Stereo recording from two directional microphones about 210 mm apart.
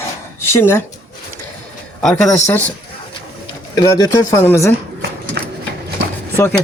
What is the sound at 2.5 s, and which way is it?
Speech, 10° left (ahead or behind).